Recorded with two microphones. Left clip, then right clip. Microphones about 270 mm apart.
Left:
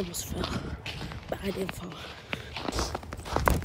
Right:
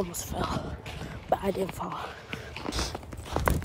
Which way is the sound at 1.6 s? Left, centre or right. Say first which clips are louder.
Right 4 dB; centre.